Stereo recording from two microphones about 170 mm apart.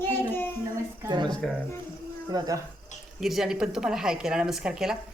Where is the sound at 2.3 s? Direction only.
20° right (ahead or behind).